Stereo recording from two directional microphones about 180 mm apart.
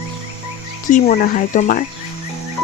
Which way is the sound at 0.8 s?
40° left (ahead or behind).